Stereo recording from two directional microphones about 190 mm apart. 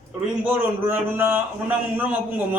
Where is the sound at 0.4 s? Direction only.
10° right (ahead or behind).